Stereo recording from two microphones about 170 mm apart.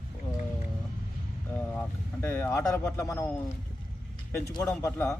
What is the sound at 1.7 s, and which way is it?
Speech, 15° left (ahead or behind).